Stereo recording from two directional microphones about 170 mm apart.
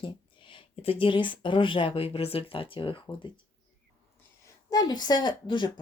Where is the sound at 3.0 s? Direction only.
25° left (ahead or behind).